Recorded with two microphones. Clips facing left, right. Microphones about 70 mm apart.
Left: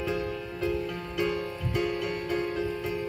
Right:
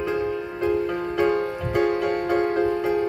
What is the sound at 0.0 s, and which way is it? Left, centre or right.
Music, right.